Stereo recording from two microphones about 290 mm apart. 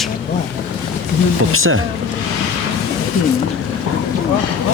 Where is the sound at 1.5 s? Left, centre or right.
Right.